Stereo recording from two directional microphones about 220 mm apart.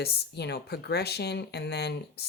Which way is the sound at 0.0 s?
50° left (ahead or behind).